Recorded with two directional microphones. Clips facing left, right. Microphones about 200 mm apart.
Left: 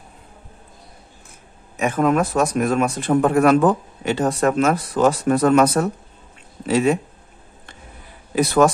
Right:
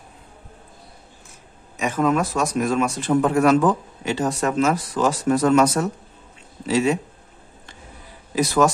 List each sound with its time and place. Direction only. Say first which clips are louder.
1.8 s speech: left 2 dB; 55° left (ahead or behind)
8.4 s speech: left 3 dB; 60° left (ahead or behind)